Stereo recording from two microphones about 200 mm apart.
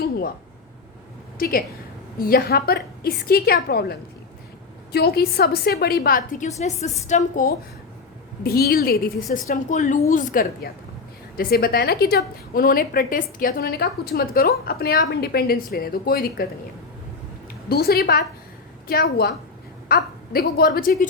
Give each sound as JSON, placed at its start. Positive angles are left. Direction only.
{"t": 1.4, "sound": "a woman's voice", "side_deg": 45}
{"t": 8.4, "sound": "a woman's voice", "side_deg": 50}
{"t": 17.7, "sound": "a woman's voice", "side_deg": 50}